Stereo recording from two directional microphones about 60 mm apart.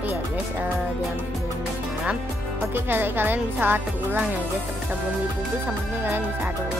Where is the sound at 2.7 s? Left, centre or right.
Right.